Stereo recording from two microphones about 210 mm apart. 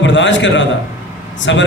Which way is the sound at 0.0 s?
60° left (ahead or behind).